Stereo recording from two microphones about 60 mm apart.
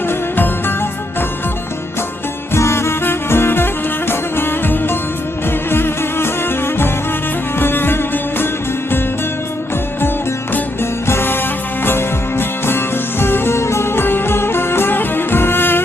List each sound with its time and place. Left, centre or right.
0.1 s music: left
2.5 s music: left
7.6 s music: left
11.0 s music: left